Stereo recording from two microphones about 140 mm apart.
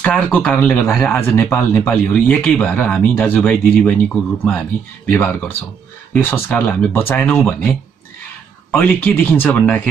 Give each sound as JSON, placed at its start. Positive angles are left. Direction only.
{"t": 0.0, "sound": "speech", "side_deg": 10}
{"t": 8.7, "sound": "speech", "side_deg": 15}